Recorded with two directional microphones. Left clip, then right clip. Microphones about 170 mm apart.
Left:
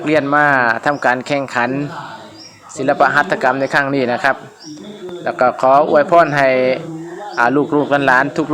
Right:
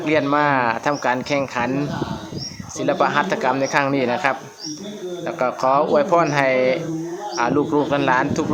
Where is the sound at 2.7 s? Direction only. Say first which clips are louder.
Left 6 dB; 15° left (ahead or behind).